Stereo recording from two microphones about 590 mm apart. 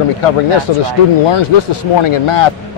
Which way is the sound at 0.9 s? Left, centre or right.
Left.